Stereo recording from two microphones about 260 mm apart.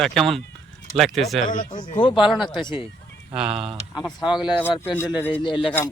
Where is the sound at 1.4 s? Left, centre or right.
Left.